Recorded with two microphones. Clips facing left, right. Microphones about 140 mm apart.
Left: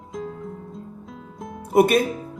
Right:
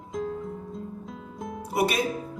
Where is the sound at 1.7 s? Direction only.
50° left (ahead or behind).